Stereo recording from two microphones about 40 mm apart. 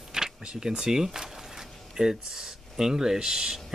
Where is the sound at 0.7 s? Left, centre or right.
Centre.